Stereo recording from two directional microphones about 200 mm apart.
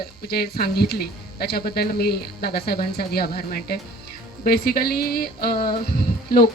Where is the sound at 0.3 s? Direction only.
50° left (ahead or behind).